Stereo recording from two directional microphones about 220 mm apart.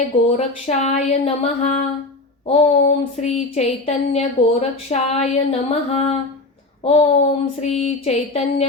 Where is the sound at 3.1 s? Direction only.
30° left (ahead or behind).